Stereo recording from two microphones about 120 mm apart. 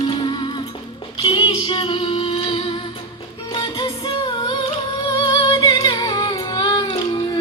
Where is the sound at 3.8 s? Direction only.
40° left (ahead or behind).